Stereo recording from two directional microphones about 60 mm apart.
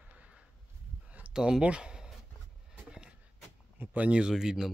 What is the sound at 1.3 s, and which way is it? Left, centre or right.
Speech, centre.